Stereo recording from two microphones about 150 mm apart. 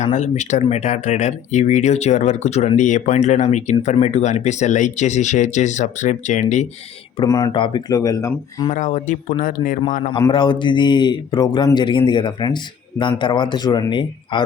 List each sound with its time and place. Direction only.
0.0 s speech: 50° left (ahead or behind)
7.3 s speech: 25° left (ahead or behind)
8.7 s speech: 55° left (ahead or behind)
10.1 s a man's voice: 30° left (ahead or behind)